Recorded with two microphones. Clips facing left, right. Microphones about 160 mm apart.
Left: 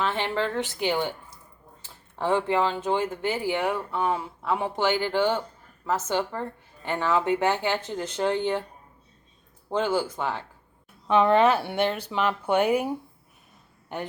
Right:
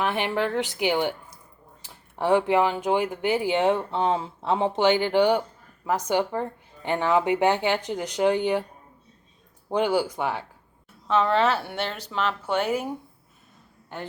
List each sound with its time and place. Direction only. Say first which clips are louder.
0.0 s speech: right 2 dB; 15° right (ahead or behind)
9.6 s speech: right 2 dB; 15° right (ahead or behind)
11.1 s speech: left 2 dB; 10° left (ahead or behind)
13.9 s speech: left 3 dB; 15° left (ahead or behind)